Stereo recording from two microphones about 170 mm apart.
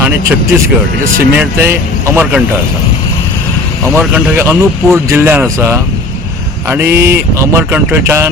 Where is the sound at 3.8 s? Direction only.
5° right (ahead or behind).